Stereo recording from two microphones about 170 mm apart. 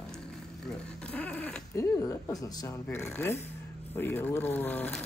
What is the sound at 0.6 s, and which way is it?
Speech, 10° left (ahead or behind).